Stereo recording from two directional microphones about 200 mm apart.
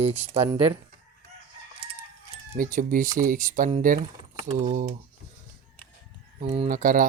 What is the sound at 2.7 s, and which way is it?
Speech, 40° right (ahead or behind).